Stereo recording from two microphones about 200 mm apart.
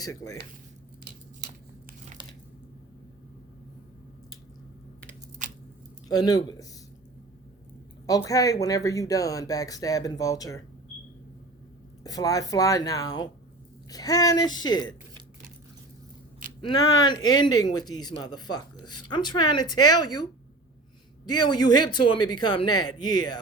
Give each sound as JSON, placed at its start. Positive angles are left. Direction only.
{"t": 0.0, "sound": "speech", "side_deg": 15}
{"t": 6.1, "sound": "speech", "side_deg": 20}
{"t": 8.0, "sound": "speech", "side_deg": 15}
{"t": 12.0, "sound": "speech", "side_deg": 15}
{"t": 16.6, "sound": "speech", "side_deg": 20}
{"t": 21.2, "sound": "speech", "side_deg": 20}